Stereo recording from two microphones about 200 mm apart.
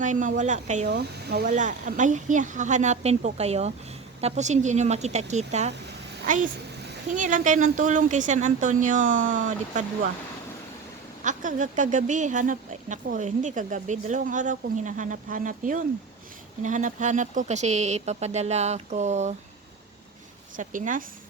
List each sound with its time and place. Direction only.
0.0 s speech: 40° right (ahead or behind)
0.9 s speech: 55° right (ahead or behind)
1.5 s a child's voice: 40° right (ahead or behind)
11.2 s speech: 40° right (ahead or behind)
20.6 s speech: 40° right (ahead or behind)